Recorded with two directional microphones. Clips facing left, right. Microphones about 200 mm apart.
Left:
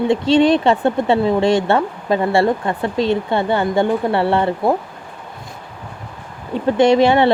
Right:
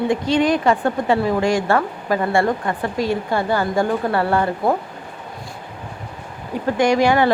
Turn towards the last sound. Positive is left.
turn(degrees=25)  # may be behind; listen again after turning